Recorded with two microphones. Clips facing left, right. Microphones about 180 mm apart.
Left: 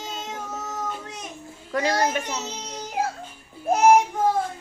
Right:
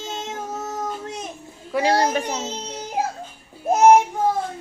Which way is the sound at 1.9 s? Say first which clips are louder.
Right 5 dB; 30° right (ahead or behind).